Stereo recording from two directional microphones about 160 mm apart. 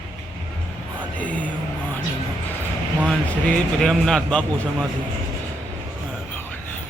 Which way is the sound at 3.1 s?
5° left (ahead or behind).